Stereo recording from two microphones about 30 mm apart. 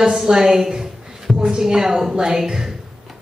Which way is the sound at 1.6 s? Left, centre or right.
Centre.